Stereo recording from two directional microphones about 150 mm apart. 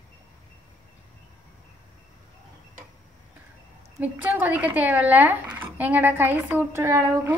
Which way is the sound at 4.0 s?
10° right (ahead or behind).